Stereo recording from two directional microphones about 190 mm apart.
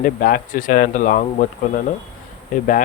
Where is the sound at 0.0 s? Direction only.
50° left (ahead or behind).